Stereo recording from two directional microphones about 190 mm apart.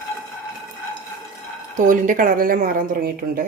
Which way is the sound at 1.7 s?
45° right (ahead or behind).